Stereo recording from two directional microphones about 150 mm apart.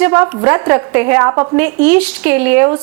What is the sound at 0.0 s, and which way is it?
A woman's voice, 15° right (ahead or behind).